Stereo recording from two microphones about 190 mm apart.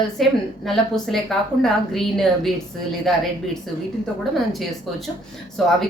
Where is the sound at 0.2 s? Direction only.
Centre (ahead or behind).